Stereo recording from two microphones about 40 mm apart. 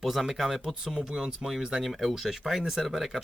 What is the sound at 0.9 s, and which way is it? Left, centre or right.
Speech, centre.